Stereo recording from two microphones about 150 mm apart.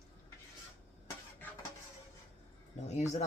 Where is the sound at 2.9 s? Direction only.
50° left (ahead or behind).